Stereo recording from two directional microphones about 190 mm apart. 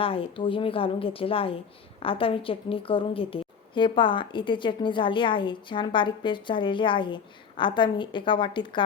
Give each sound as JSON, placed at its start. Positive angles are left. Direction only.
{"t": 0.0, "sound": "a woman's voice", "side_deg": 30}